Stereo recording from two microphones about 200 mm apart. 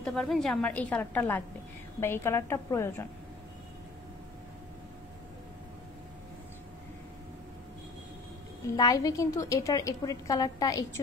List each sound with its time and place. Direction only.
0.0 s a woman's voice: centre (ahead or behind)
8.7 s a woman's voice: 20° left (ahead or behind)